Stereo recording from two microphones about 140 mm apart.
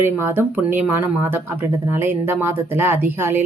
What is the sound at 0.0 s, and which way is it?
Speech, 15° right (ahead or behind).